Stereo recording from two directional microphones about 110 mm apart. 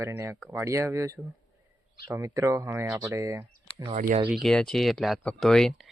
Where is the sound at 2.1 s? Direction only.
30° right (ahead or behind).